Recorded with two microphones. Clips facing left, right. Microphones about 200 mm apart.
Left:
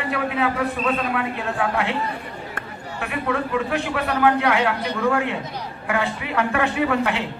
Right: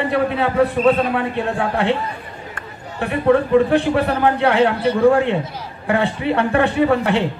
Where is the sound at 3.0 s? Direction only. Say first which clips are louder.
Right 9 dB; 35° right (ahead or behind).